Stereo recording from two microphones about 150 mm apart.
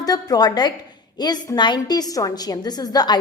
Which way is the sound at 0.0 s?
25° left (ahead or behind).